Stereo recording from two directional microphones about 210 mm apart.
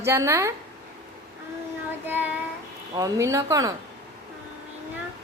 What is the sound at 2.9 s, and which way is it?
Speech, 15° right (ahead or behind).